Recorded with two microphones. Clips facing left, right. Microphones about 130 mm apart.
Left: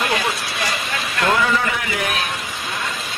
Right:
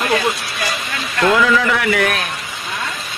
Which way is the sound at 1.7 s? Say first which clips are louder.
Right 7 dB; 70° right (ahead or behind).